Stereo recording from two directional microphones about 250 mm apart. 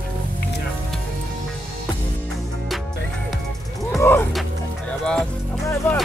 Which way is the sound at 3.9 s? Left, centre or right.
Centre.